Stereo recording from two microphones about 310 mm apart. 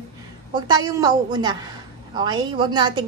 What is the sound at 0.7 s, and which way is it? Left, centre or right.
A woman's voice, centre.